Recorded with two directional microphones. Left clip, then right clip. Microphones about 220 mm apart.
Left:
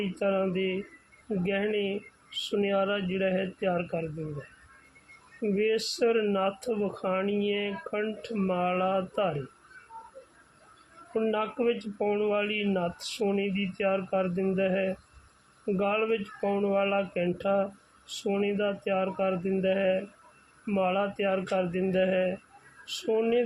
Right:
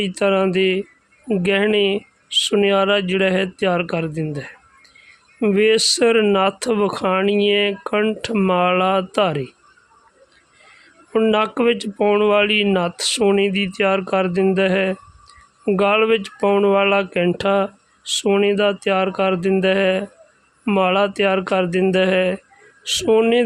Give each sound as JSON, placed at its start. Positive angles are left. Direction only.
{"t": 0.2, "sound": "speech", "side_deg": -50}
{"t": 5.4, "sound": "speech", "side_deg": -50}
{"t": 11.1, "sound": "speech", "side_deg": -50}